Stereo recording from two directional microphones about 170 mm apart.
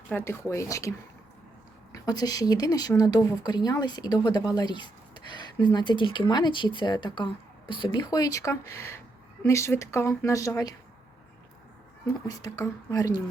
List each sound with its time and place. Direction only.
0.1 s a woman's voice: 15° left (ahead or behind)
12.0 s speech: 20° left (ahead or behind)